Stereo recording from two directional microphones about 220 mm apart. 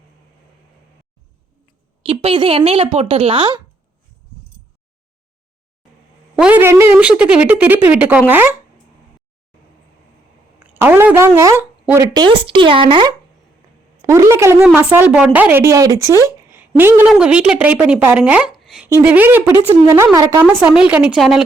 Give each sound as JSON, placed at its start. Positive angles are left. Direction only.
{"t": 2.0, "sound": "a woman's voice", "side_deg": -25}
{"t": 6.3, "sound": "a woman's voice", "side_deg": -5}
{"t": 10.6, "sound": "a woman's voice", "side_deg": -10}